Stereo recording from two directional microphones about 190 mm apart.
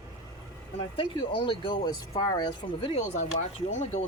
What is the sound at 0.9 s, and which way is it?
Speech, 25° left (ahead or behind).